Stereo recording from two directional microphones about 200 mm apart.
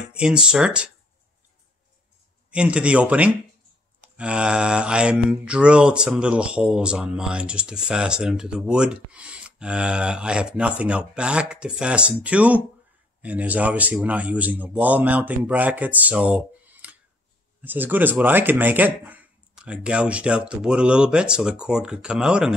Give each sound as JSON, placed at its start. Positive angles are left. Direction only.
{"t": 0.1, "sound": "mantra", "side_deg": -5}
{"t": 2.5, "sound": "mantra", "side_deg": -5}
{"t": 13.2, "sound": "speech", "side_deg": -5}
{"t": 17.6, "sound": "mantra", "side_deg": -10}